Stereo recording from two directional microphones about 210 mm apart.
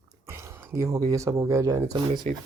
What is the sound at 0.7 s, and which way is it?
Speech, 15° right (ahead or behind).